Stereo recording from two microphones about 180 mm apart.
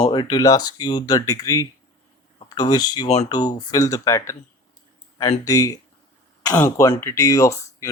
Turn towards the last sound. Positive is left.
turn(degrees=15)  # may be behind; listen again after turning